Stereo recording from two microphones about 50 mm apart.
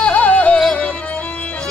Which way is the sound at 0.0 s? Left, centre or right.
Left.